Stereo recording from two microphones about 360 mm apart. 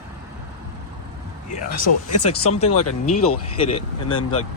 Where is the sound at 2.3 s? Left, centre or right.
Centre.